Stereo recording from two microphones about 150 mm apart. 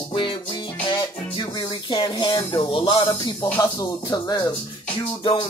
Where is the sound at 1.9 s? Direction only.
30° left (ahead or behind).